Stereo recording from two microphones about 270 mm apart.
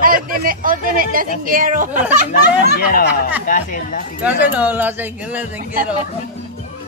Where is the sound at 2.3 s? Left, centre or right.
Left.